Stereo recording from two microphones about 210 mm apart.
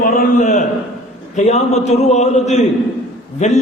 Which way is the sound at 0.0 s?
40° left (ahead or behind).